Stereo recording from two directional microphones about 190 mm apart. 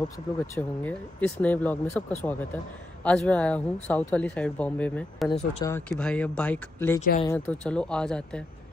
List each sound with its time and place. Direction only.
0.6 s speech: 10° left (ahead or behind)
5.4 s speech: 35° left (ahead or behind)
5.7 s speech: 10° left (ahead or behind)
7.0 s speech: 40° left (ahead or behind)
7.2 s speech: 10° left (ahead or behind)